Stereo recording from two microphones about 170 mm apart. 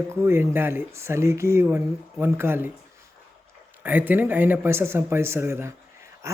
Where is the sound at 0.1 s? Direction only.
15° right (ahead or behind).